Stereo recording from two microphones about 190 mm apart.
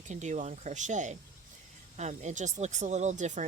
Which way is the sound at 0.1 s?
40° right (ahead or behind).